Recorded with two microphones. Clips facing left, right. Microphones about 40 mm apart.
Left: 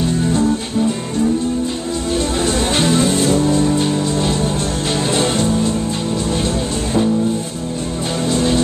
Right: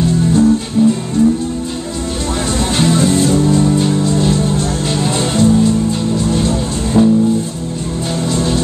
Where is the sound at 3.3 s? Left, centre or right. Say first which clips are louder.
Right 2 dB; centre.